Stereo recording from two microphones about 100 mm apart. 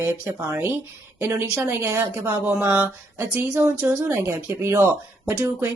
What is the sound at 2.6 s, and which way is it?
Speech, 20° right (ahead or behind).